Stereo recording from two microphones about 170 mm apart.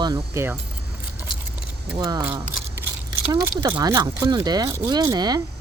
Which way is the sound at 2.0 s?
25° right (ahead or behind).